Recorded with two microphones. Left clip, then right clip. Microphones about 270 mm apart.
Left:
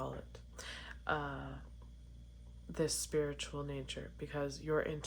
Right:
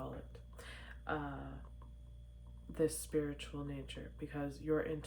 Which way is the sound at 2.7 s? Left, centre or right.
Left.